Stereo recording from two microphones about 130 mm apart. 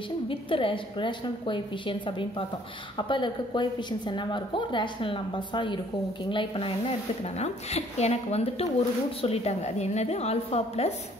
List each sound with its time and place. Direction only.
0.3 s a woman's voice: 40° left (ahead or behind)
7.3 s a woman's voice: 55° left (ahead or behind)